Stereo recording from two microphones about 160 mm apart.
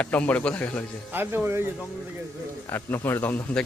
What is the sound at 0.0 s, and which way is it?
Speech, 10° left (ahead or behind).